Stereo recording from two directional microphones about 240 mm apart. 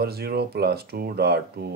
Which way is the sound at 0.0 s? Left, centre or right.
Right.